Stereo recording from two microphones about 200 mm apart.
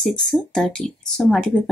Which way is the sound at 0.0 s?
Centre (ahead or behind).